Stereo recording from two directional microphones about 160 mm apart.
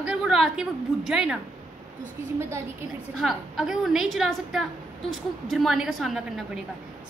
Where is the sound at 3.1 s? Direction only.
Centre (ahead or behind).